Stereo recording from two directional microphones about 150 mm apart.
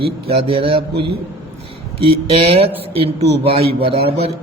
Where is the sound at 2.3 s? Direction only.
40° right (ahead or behind).